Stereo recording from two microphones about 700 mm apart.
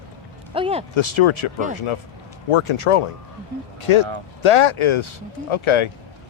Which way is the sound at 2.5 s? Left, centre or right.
Left.